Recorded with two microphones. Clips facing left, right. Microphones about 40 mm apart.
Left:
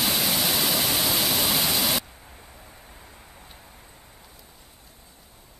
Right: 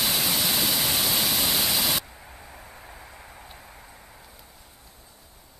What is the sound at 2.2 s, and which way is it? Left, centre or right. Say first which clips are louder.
Vehicle: right 3 dB; centre.